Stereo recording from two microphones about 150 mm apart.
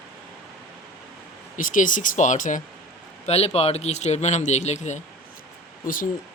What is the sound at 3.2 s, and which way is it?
Speech, 45° left (ahead or behind).